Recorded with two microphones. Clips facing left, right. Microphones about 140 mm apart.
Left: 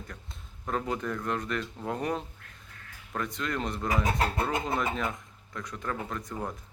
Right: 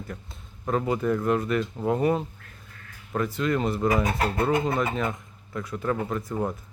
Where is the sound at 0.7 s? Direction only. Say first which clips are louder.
Right 7 dB; 5° right (ahead or behind).